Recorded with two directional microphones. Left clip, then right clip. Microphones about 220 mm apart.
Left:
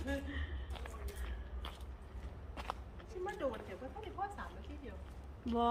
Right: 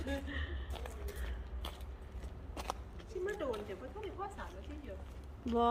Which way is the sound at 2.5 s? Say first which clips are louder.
Right 2 dB; 55° right (ahead or behind).